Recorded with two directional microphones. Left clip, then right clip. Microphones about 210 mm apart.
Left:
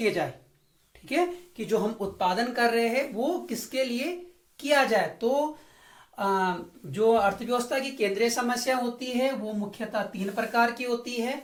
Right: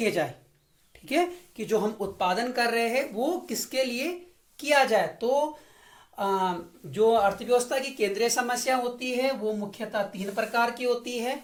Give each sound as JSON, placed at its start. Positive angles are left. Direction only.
{"t": 1.0, "sound": "speech", "side_deg": -45}